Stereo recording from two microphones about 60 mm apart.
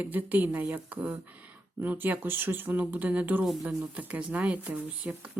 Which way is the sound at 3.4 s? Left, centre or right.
Centre.